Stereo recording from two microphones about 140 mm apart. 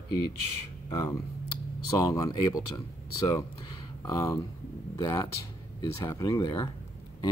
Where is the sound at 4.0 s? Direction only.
20° left (ahead or behind).